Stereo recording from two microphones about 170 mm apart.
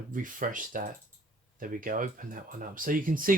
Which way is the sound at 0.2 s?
50° right (ahead or behind).